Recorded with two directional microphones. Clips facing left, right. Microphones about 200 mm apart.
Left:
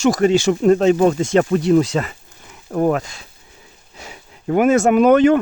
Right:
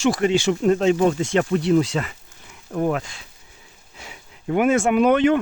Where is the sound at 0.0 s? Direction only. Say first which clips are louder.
Left 4 dB; 40° left (ahead or behind).